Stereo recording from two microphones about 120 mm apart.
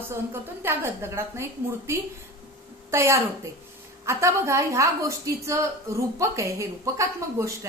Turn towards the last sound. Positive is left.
turn(degrees=-25)  # may be behind; listen again after turning